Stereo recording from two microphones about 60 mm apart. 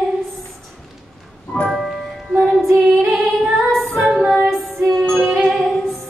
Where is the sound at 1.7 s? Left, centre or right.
Centre.